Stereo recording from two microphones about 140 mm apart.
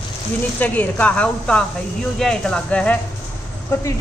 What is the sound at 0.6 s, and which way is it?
A man's voice, 10° left (ahead or behind).